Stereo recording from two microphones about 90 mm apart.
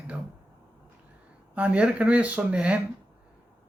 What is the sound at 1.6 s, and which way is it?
Speech, 15° right (ahead or behind).